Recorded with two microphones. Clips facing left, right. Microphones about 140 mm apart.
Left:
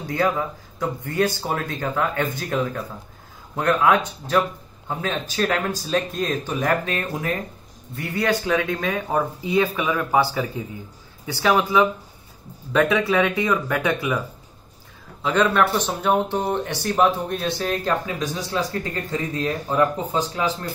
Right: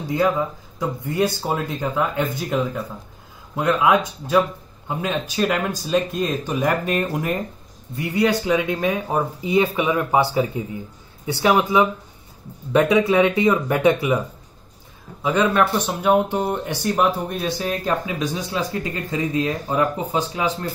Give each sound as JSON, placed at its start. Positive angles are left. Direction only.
{"t": 0.4, "sound": "speech", "side_deg": -15}
{"t": 11.2, "sound": "speech", "side_deg": -15}
{"t": 15.2, "sound": "speech", "side_deg": -10}